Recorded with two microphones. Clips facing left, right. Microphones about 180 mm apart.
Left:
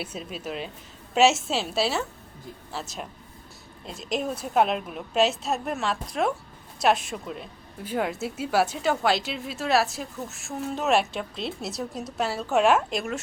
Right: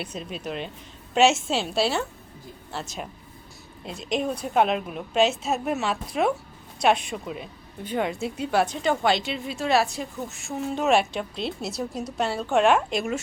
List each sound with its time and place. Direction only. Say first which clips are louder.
0.0 s a woman's voice: right 1 dB; 5° left (ahead or behind)